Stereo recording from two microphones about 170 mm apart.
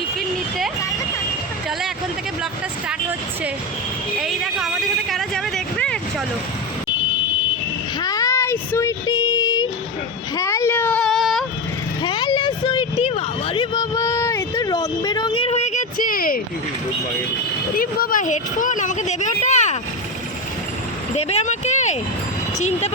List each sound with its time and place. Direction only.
4.2 s a sound: centre (ahead or behind)
8.0 s child singing: 20° left (ahead or behind)
10.3 s whimper: 15° left (ahead or behind); by 11.4 s centre (ahead or behind)
12.0 s vehicle: 25° left (ahead or behind); by 16.4 s 55° left (ahead or behind)
17.7 s speech: 55° left (ahead or behind)
21.2 s a sound: 40° left (ahead or behind)
22.5 s speech: 40° left (ahead or behind)